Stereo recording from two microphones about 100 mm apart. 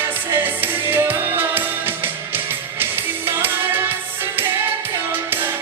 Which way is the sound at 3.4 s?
20° right (ahead or behind).